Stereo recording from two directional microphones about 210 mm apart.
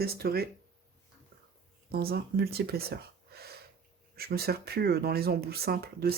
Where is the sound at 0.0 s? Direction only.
45° right (ahead or behind).